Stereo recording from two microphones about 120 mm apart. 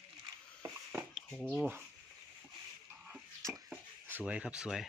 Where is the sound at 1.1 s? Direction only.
5° left (ahead or behind).